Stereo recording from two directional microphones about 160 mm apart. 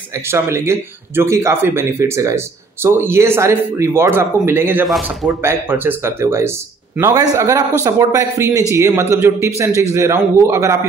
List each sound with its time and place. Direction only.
0.1 s speech: 15° right (ahead or behind)
4.8 s speech: centre (ahead or behind)
5.4 s a man's voice: 15° right (ahead or behind)